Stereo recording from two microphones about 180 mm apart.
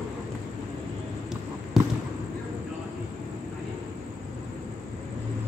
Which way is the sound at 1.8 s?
Centre (ahead or behind).